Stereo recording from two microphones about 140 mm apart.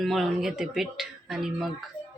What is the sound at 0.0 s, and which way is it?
Speech, centre (ahead or behind).